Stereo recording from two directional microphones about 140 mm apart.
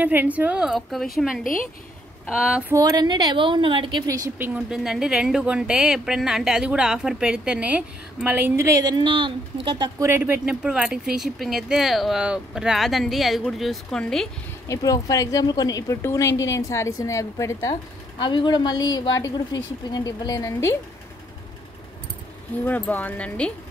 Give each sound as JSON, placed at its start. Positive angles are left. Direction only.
{"t": 0.0, "sound": "speech", "side_deg": -10}
{"t": 1.4, "sound": "a woman's voice", "side_deg": 75}
{"t": 2.2, "sound": "speech", "side_deg": -5}
{"t": 2.7, "sound": "a woman's voice", "side_deg": -25}
{"t": 4.4, "sound": "speech", "side_deg": -15}
{"t": 4.7, "sound": "speech", "side_deg": -5}
{"t": 9.9, "sound": "speech", "side_deg": -15}
{"t": 14.7, "sound": "a woman's voice", "side_deg": 25}
{"t": 18.2, "sound": "a woman's voice", "side_deg": 35}
{"t": 22.7, "sound": "speech", "side_deg": 10}